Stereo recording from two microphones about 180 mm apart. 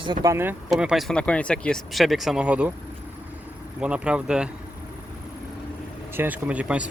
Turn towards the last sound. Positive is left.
turn(degrees=-5)  # may be behind; listen again after turning